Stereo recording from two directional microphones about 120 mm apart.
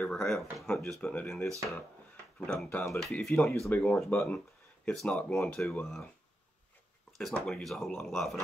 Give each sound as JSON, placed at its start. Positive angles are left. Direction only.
{"t": 0.0, "sound": "speech", "side_deg": 5}
{"t": 7.1, "sound": "speech", "side_deg": 0}